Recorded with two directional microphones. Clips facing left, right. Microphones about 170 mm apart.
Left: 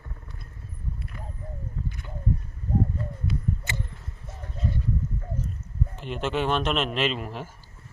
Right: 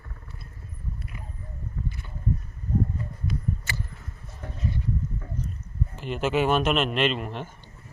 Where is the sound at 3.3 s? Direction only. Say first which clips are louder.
Even; 20° left (ahead or behind).